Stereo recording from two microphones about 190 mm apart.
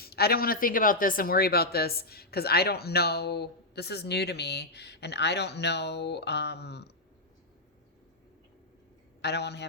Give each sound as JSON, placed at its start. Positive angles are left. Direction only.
{"t": 0.0, "sound": "speech", "side_deg": 55}
{"t": 9.2, "sound": "speech", "side_deg": 60}